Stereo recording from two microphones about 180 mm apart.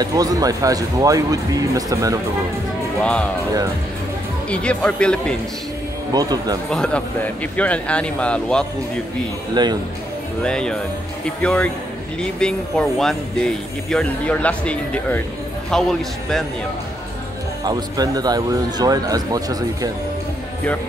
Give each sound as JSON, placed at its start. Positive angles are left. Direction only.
{"t": 0.0, "sound": "speech", "side_deg": -20}
{"t": 3.0, "sound": "speech", "side_deg": 5}
{"t": 4.5, "sound": "speech", "side_deg": 5}
{"t": 6.1, "sound": "speech", "side_deg": -20}
{"t": 6.7, "sound": "speech", "side_deg": 5}
{"t": 9.5, "sound": "speech", "side_deg": -25}
{"t": 10.4, "sound": "speech", "side_deg": 5}
{"t": 17.6, "sound": "speech", "side_deg": -20}